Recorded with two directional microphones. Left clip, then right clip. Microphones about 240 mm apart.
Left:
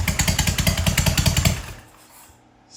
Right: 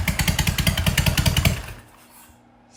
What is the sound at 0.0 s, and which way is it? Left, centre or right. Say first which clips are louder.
Motorcycle: left 1 dB; centre.